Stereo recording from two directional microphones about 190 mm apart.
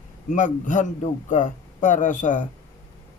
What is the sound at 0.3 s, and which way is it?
A man's voice, 40° left (ahead or behind).